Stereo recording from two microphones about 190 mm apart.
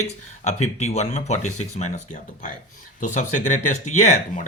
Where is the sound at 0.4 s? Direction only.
35° left (ahead or behind).